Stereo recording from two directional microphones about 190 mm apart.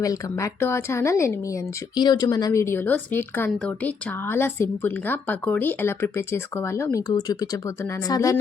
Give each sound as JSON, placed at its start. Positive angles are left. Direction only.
{"t": 0.0, "sound": "a woman's voice", "side_deg": 15}